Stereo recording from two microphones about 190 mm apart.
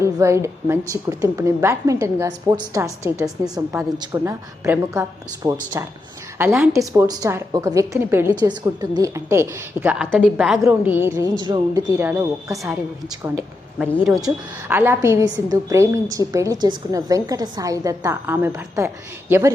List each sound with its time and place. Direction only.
0.0 s a woman's voice: 15° right (ahead or behind)
11.3 s a woman's voice: 20° right (ahead or behind)
14.3 s a woman's voice: 10° right (ahead or behind)